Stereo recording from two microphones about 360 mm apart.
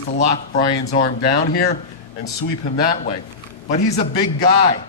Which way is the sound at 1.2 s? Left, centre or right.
Left.